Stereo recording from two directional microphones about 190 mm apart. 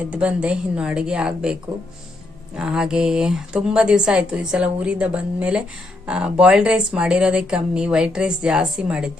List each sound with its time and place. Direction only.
0.1 s speech: 5° right (ahead or behind)
2.6 s speech: 5° right (ahead or behind)